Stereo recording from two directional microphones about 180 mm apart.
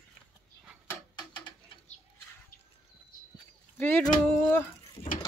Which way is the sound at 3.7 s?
10° left (ahead or behind).